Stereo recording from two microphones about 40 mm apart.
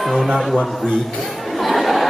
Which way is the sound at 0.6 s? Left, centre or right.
Centre.